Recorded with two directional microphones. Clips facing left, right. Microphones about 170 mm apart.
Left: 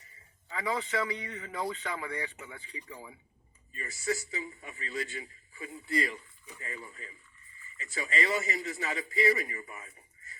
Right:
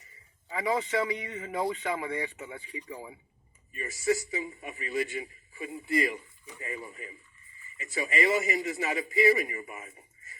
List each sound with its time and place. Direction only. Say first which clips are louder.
0.5 s a man's voice: right 4 dB; 20° right (ahead or behind)